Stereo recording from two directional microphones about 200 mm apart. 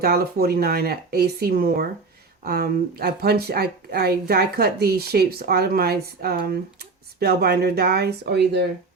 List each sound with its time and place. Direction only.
0.0 s speech: 50° right (ahead or behind)